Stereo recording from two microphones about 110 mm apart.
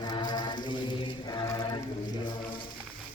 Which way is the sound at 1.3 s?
35° left (ahead or behind).